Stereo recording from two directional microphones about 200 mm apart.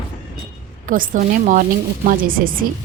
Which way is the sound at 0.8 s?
45° right (ahead or behind).